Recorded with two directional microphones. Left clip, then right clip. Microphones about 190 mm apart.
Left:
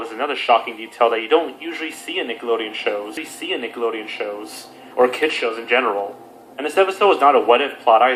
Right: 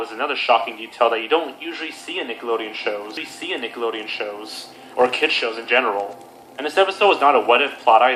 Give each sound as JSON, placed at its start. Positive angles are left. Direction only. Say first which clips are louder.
{"t": 0.2, "sound": "a man's voice", "louder": "left 1 dB", "side_deg": 40}